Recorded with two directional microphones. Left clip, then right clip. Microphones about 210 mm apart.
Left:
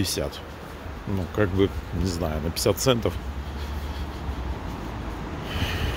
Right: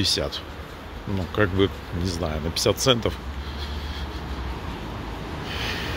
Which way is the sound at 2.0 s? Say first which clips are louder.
Even; 15° left (ahead or behind).